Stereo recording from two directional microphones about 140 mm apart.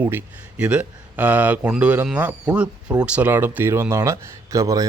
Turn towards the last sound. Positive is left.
turn(degrees=-25)  # may be behind; listen again after turning